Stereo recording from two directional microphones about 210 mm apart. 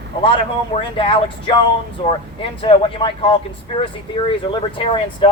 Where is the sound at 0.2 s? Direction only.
25° left (ahead or behind).